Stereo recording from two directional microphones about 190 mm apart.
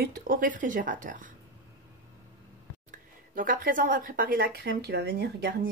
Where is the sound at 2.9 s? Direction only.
45° right (ahead or behind).